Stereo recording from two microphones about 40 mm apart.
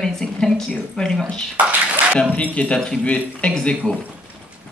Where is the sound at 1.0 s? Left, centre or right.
Centre.